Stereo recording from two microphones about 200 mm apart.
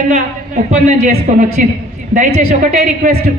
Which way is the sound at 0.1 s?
35° right (ahead or behind).